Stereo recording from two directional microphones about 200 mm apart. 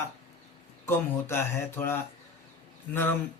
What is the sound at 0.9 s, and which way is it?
A man's voice, 10° left (ahead or behind).